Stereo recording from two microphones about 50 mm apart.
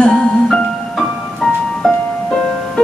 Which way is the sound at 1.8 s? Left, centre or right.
Centre.